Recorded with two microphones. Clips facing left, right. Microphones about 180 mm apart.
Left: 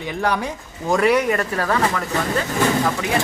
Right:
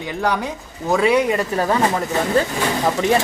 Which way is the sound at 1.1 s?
20° right (ahead or behind).